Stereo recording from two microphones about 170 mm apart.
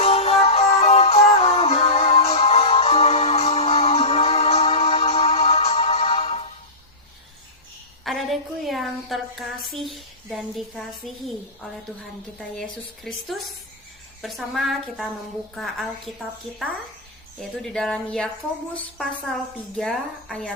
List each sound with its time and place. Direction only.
0.0 s music: 35° left (ahead or behind)
8.0 s a sound: centre (ahead or behind)
13.1 s a woman's voice: centre (ahead or behind)